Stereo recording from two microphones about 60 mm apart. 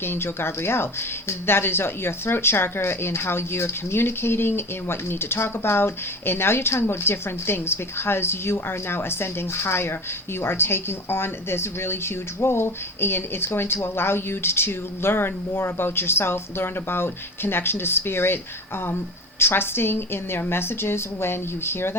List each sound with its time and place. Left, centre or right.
0.0 s speech: left